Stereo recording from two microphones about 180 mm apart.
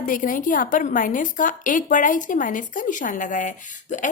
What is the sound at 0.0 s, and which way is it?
A woman's voice, 45° left (ahead or behind).